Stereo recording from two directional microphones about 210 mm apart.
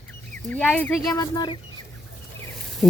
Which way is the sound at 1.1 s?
20° left (ahead or behind).